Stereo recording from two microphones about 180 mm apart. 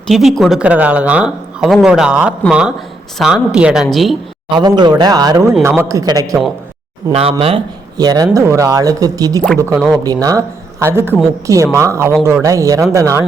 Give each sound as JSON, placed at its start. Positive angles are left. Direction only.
{"t": 0.1, "sound": "speech", "side_deg": 0}
{"t": 4.5, "sound": "speech", "side_deg": -25}
{"t": 7.1, "sound": "speech", "side_deg": -30}
{"t": 9.7, "sound": "speech", "side_deg": 0}
{"t": 10.0, "sound": "speech", "side_deg": -20}